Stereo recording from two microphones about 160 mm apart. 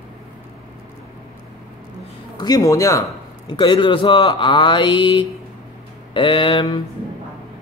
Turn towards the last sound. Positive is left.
turn(degrees=35)  # may be behind; listen again after turning